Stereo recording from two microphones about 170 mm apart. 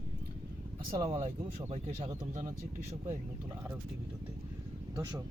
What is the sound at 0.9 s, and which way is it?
Speech, 25° right (ahead or behind).